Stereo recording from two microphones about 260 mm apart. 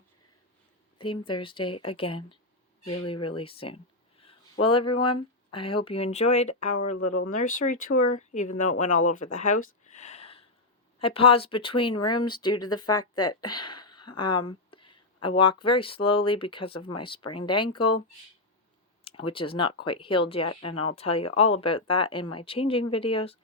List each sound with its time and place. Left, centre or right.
0.9 s speech: centre
9.8 s a sound: left
11.0 s speech: left
19.0 s speech: left